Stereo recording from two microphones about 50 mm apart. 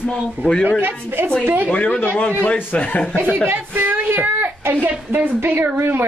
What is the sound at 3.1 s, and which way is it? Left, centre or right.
Speech, right.